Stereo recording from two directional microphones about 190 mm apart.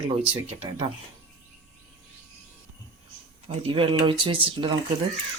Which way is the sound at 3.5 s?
30° right (ahead or behind).